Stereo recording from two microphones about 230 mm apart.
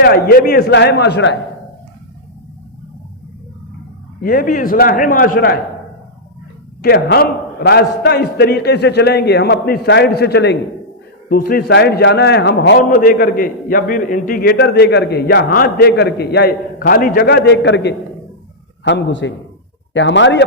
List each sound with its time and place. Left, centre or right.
0.0 s a man's voice: left
4.2 s a man's voice: left
6.8 s a man's voice: left
12.9 s a man's voice: left